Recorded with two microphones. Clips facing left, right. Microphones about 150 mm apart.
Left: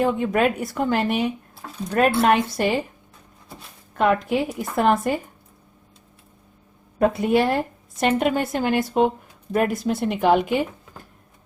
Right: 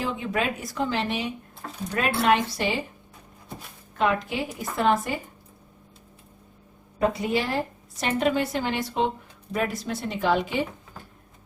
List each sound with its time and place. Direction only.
0.0 s a woman's voice: 55° left (ahead or behind)
3.9 s a woman's voice: 55° left (ahead or behind)
7.0 s a woman's voice: 55° left (ahead or behind)